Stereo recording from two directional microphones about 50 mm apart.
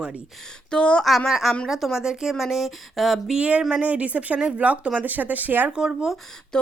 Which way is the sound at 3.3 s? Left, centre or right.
Right.